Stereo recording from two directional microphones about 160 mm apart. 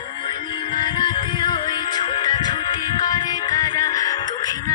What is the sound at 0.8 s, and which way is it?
Music, 30° left (ahead or behind).